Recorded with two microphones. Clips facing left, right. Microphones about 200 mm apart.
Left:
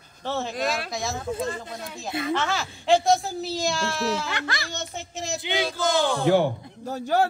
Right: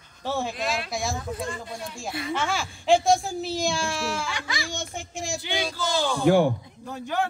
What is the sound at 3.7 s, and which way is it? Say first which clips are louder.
Speech: left 2 dB; 15° right (ahead or behind).